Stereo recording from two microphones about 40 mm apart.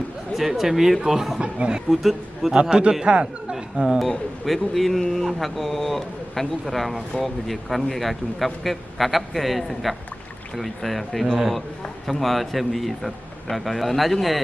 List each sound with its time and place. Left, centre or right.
0.3 s speech: centre
1.4 s speech: right
1.9 s speech: centre
2.5 s speech: right
4.4 s speech: centre